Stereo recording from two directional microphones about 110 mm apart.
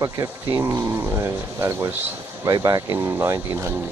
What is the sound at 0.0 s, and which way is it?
Speech, 25° right (ahead or behind).